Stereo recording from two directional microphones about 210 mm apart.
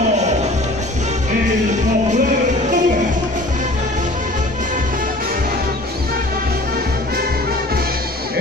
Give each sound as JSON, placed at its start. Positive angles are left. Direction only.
{"t": 2.1, "sound": "music", "side_deg": -35}